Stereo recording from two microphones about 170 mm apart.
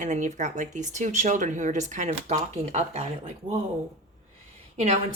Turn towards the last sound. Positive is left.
turn(degrees=-40)  # may be behind; listen again after turning